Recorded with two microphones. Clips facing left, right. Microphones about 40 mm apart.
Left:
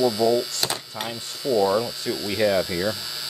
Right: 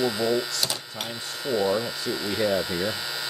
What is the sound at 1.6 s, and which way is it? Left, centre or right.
Speech, left.